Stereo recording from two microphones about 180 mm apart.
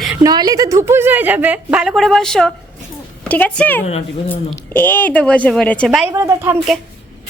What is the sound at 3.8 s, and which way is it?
Speech, 35° left (ahead or behind).